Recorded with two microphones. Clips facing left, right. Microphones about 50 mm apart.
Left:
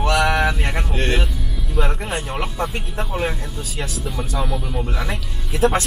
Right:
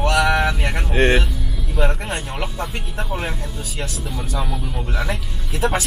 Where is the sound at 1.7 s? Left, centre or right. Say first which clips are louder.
Right 1 dB; centre.